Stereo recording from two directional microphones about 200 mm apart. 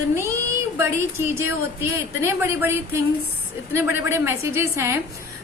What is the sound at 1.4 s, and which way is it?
A woman's voice, 10° right (ahead or behind).